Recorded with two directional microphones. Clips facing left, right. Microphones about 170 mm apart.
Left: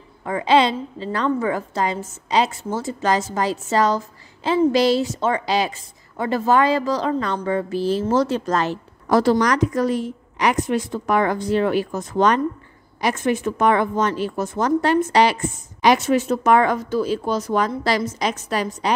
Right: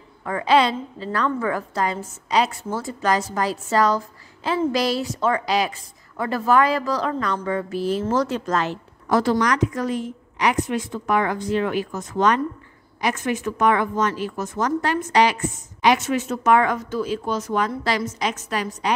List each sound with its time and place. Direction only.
0.2 s a woman's voice: 20° left (ahead or behind)